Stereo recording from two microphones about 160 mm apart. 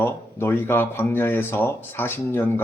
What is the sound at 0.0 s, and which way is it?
Speech, 15° left (ahead or behind).